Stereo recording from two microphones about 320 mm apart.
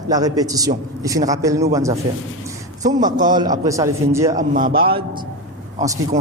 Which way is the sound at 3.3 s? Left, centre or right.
Centre.